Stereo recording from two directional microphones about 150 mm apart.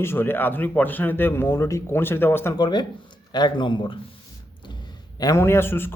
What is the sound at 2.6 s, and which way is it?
A man's voice, 30° left (ahead or behind).